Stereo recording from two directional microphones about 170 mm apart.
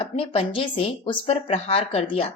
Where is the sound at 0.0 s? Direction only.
30° left (ahead or behind).